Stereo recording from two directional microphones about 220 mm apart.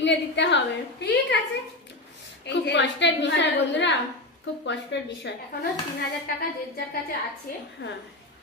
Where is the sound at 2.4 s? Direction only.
55° left (ahead or behind).